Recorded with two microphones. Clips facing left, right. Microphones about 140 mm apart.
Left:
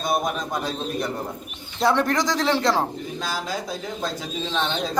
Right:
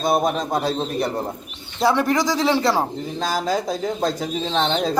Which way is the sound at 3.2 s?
40° right (ahead or behind).